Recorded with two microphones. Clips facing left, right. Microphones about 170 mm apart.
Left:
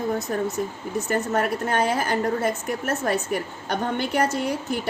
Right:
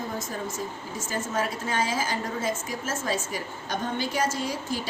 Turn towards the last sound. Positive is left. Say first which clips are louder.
# left 4 dB
turn(degrees=60)  # may be behind; listen again after turning